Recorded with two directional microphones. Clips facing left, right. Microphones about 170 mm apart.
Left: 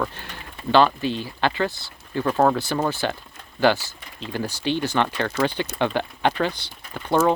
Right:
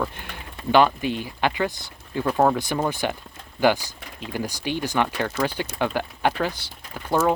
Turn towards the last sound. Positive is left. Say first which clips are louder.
# left 2 dB
turn(degrees=-5)  # may be behind; listen again after turning